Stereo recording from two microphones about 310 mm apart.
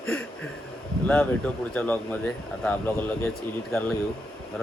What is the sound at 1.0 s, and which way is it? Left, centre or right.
Speech, centre.